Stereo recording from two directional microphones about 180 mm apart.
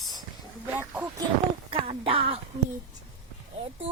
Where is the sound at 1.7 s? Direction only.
30° right (ahead or behind).